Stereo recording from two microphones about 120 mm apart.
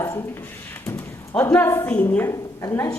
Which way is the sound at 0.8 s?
25° left (ahead or behind).